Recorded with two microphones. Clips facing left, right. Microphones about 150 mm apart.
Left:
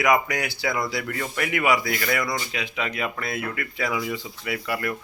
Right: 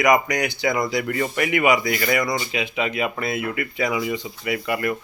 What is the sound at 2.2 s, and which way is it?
Speech, 20° right (ahead or behind).